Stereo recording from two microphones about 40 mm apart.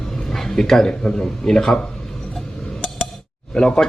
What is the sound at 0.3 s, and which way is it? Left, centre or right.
Speech, centre.